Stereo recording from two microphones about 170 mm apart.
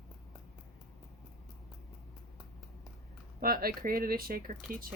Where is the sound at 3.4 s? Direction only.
60° right (ahead or behind).